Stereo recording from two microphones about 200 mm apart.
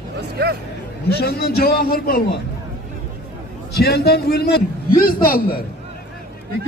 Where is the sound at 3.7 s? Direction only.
55° left (ahead or behind).